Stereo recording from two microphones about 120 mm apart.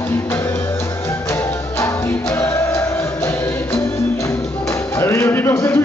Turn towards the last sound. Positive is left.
turn(degrees=20)  # may be behind; listen again after turning